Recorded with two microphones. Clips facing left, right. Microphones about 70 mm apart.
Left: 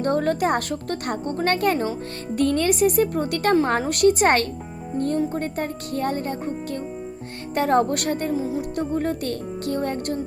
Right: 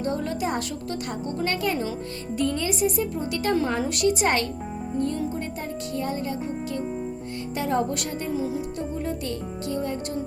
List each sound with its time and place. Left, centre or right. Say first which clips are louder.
0.0 s a woman's voice: left 6 dB; left
2.3 s music: left 5 dB; left
3.5 s a woman's voice: left 4 dB; left
7.5 s music: left 6 dB; left
8.3 s speech: left 2 dB; left
8.7 s music: left 5 dB; left